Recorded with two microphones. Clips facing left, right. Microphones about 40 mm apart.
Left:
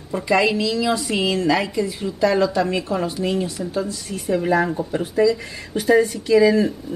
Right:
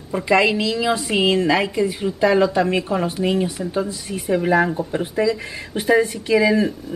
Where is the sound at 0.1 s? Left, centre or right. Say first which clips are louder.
Right 1 dB; right.